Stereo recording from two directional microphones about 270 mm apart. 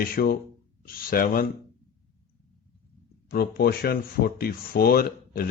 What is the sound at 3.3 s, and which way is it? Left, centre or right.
Speech, left.